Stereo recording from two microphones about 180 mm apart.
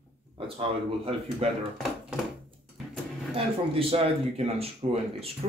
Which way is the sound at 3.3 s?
30° right (ahead or behind).